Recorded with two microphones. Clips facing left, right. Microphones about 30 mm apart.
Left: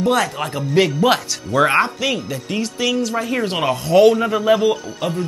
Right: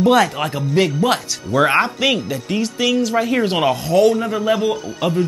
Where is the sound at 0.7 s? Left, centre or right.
Centre.